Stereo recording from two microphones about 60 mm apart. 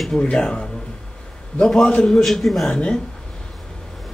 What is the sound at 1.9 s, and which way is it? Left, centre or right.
Speech, centre.